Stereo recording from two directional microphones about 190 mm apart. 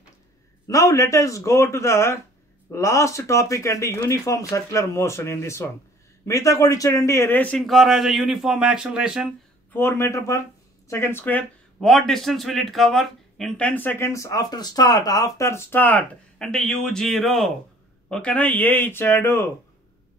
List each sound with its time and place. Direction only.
0.7 s a man's voice: 15° left (ahead or behind); by 9.3 s 5° right (ahead or behind)
9.7 s speech: 15° left (ahead or behind)